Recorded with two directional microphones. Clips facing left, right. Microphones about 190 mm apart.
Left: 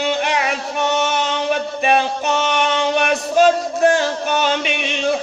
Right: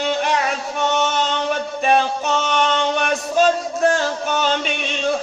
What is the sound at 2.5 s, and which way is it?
Music, 5° left (ahead or behind).